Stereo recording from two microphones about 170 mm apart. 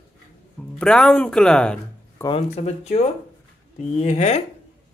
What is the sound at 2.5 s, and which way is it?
Speech, 40° left (ahead or behind).